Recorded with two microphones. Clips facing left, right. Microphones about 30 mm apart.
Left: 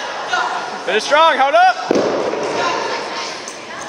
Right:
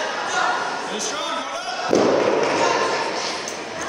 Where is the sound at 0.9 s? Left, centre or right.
Left.